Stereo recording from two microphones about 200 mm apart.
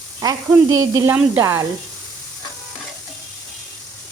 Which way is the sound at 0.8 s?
15° right (ahead or behind).